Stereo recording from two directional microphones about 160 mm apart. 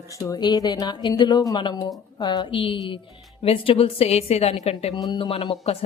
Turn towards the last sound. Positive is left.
turn(degrees=35)  # may be behind; listen again after turning